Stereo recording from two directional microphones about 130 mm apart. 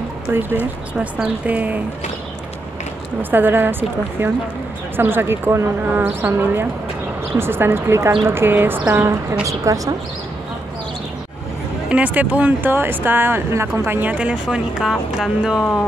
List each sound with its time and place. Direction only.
0.3 s speech: 15° right (ahead or behind)
3.2 s speech: 15° right (ahead or behind)
11.9 s speech: 10° right (ahead or behind)